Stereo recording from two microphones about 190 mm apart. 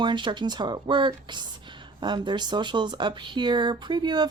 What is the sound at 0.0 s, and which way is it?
Speech, 25° right (ahead or behind).